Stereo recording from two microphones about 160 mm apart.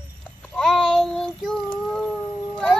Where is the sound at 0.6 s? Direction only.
5° left (ahead or behind).